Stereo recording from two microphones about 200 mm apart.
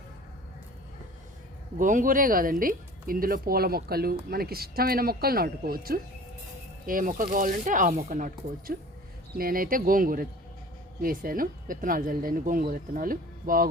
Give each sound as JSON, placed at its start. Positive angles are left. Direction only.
{"t": 1.8, "sound": "speech", "side_deg": -40}